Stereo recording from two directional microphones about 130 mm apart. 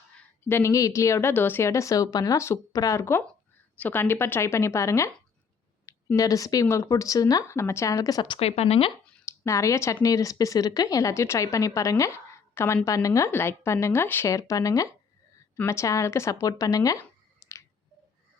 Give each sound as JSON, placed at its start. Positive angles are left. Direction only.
{"t": 0.4, "sound": "speech", "side_deg": 20}
{"t": 8.4, "sound": "speech", "side_deg": 50}
{"t": 9.2, "sound": "speech", "side_deg": 20}